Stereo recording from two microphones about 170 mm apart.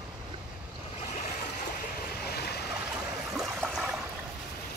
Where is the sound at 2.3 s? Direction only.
70° left (ahead or behind).